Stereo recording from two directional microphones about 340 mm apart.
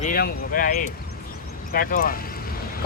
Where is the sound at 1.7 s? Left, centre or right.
Left.